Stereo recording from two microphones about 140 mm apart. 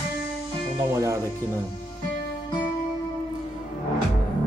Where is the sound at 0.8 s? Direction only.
20° right (ahead or behind).